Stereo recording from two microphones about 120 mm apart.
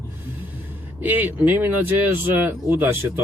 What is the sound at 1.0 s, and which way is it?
Speech, 15° right (ahead or behind).